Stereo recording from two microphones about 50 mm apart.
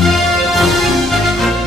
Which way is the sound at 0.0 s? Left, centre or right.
Centre.